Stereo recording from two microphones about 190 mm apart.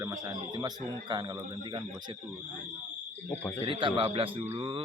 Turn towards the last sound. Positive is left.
turn(degrees=-25)  # may be behind; listen again after turning